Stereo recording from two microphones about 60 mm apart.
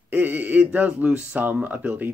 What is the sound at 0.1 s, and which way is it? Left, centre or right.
Speech, right.